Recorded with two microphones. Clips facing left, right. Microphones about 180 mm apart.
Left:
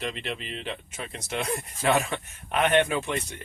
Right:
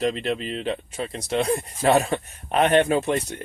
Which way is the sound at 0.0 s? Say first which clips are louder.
Right 9 dB; 35° right (ahead or behind).